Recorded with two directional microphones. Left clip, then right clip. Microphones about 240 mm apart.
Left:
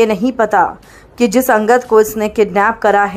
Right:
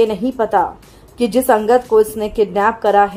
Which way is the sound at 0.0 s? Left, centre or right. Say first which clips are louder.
Left 3 dB; centre.